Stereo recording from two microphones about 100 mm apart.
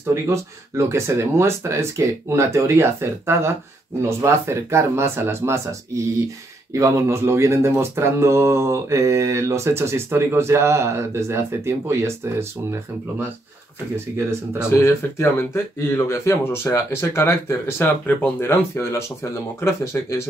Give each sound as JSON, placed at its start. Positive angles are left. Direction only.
{"t": 0.1, "sound": "mantra", "side_deg": -30}
{"t": 14.7, "sound": "speech", "side_deg": 25}